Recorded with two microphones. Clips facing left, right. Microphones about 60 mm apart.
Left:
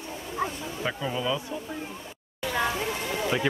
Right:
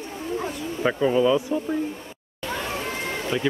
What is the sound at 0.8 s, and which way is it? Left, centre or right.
Speech, right.